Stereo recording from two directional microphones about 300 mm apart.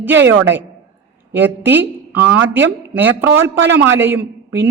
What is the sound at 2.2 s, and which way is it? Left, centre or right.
Speech, right.